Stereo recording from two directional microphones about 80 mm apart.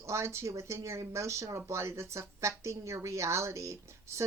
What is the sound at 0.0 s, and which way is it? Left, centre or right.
Speech, right.